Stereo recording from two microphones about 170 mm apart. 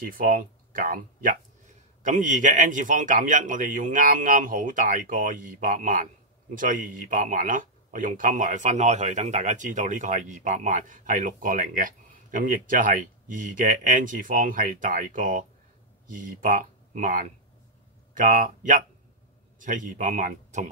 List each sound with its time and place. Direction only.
0.0 s speech: 55° right (ahead or behind)